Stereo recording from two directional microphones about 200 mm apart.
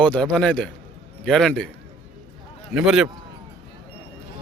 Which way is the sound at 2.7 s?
5° right (ahead or behind).